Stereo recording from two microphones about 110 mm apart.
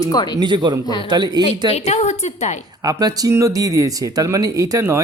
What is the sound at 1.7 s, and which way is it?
Speech, 80° left.